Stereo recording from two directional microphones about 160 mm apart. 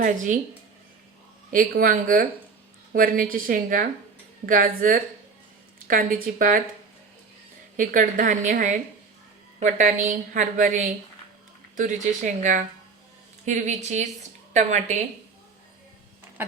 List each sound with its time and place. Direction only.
0.0 s a woman's voice: 50° right (ahead or behind)
1.5 s a woman's voice: 60° right (ahead or behind)
7.8 s a woman's voice: 55° right (ahead or behind)